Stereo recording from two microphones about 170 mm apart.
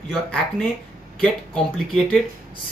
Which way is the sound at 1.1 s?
5° left (ahead or behind).